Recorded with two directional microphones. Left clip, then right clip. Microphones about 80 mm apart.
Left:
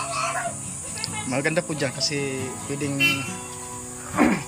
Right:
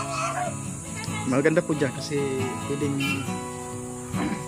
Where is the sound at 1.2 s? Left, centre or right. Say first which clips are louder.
Right 3 dB; right.